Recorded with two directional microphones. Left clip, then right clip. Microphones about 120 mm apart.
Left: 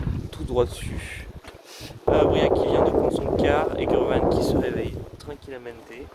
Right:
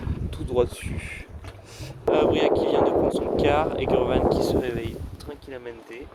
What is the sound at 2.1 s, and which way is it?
Speech, 5° right (ahead or behind).